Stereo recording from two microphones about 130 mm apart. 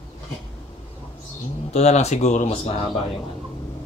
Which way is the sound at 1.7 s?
55° left (ahead or behind).